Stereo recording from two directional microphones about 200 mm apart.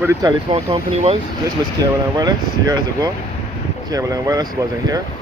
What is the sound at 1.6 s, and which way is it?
Speech, 20° right (ahead or behind).